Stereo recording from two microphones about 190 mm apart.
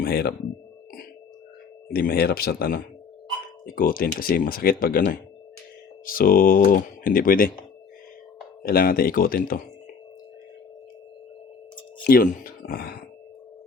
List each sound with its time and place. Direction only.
0.0 s speech: 55° left (ahead or behind)
1.9 s speech: 50° left (ahead or behind)
8.6 s speech: 50° left (ahead or behind)
12.0 s speech: 45° left (ahead or behind)